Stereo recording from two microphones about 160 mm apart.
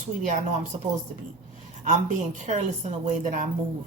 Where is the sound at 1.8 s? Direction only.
50° right (ahead or behind).